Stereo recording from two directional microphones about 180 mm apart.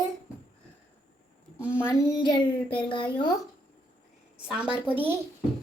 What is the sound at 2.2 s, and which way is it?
Child singing, 25° left (ahead or behind).